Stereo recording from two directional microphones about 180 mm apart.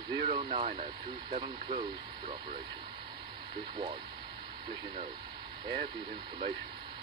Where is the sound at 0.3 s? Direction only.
30° right (ahead or behind).